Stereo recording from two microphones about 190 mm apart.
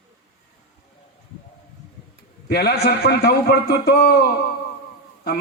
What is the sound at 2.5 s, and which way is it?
A man's voice, 60° left (ahead or behind).